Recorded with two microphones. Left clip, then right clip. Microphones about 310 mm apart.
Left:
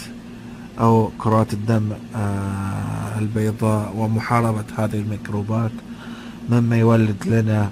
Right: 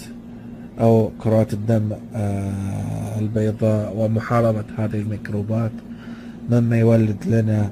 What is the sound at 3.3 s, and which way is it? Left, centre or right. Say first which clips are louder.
Speech: right 2 dB; centre.